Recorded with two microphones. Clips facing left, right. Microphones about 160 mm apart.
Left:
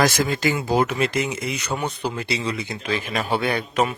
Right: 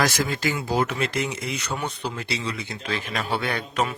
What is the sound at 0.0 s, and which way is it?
A man's voice, 20° left (ahead or behind).